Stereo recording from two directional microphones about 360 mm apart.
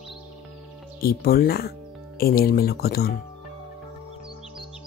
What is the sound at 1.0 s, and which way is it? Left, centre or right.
Speech, left.